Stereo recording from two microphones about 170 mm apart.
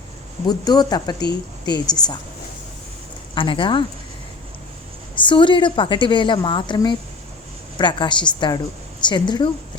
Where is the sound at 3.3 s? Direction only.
30° left (ahead or behind).